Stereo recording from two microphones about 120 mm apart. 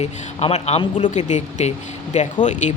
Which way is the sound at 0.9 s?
80° left.